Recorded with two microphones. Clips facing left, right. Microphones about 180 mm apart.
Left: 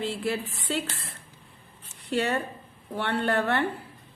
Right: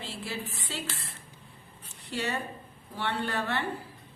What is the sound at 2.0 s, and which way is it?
A woman's voice, 60° left (ahead or behind).